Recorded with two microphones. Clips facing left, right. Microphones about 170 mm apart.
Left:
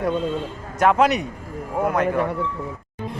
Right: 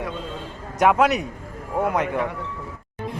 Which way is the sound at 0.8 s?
5° right (ahead or behind).